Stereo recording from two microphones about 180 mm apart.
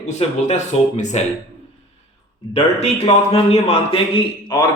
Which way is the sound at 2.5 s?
35° left (ahead or behind).